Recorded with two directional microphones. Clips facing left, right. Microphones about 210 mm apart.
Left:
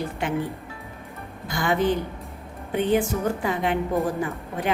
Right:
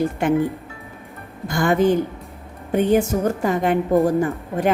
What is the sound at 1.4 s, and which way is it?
Speech, 50° right (ahead or behind).